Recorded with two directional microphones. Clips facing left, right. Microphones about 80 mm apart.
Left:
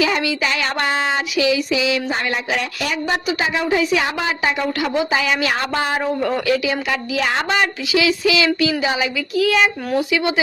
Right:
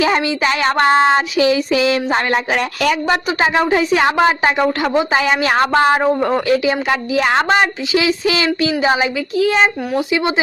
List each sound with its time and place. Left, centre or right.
0.0 s a woman's voice: right
2.8 s speech: right
3.2 s a woman's voice: right
6.1 s a woman's voice: right